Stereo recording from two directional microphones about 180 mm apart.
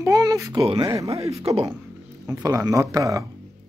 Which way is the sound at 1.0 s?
35° right (ahead or behind).